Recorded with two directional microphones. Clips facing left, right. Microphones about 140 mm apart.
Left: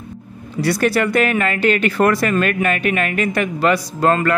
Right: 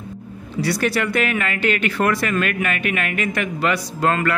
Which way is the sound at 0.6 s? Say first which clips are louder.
Left 4 dB; 50° left (ahead or behind).